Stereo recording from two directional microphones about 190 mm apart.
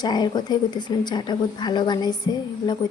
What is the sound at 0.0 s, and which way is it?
A woman's voice, 20° left (ahead or behind).